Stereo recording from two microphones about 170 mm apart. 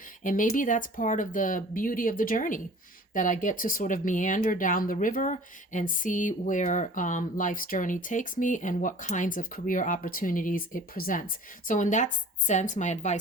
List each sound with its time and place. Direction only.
0.2 s speech: 50° left (ahead or behind)